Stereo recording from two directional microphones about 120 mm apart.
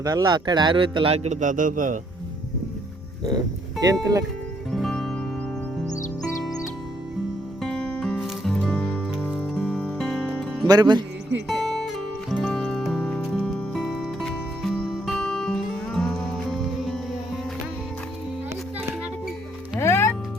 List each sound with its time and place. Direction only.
0.0 s a man's voice: 30° right (ahead or behind); by 2.0 s 90° right
3.2 s speech: 30° right (ahead or behind)
4.7 s music: 5° left (ahead or behind)
7.6 s music: 5° left (ahead or behind)
10.7 s speech: 35° right (ahead or behind)
12.3 s music: 5° left (ahead or behind)
19.8 s music: 25° left (ahead or behind)